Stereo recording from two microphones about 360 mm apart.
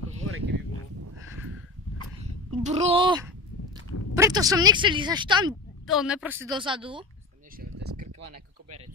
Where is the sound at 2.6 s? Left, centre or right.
Centre.